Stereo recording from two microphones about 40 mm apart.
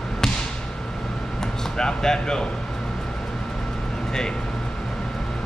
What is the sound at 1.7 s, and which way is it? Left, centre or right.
Speech, centre.